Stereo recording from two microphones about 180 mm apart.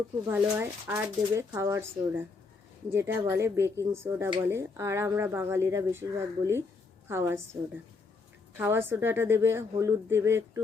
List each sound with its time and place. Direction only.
0.3 s speech: 10° right (ahead or behind)
8.5 s speech: 10° right (ahead or behind)